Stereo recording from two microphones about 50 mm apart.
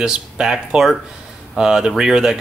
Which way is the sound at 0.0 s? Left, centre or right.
Centre.